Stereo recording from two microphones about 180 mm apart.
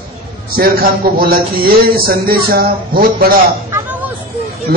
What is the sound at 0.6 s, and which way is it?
Speech, 55° right (ahead or behind).